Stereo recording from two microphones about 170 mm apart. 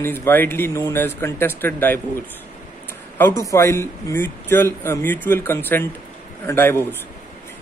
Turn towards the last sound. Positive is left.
turn(degrees=15)  # may be behind; listen again after turning